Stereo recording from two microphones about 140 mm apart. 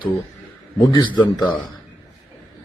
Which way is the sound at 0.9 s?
30° left (ahead or behind).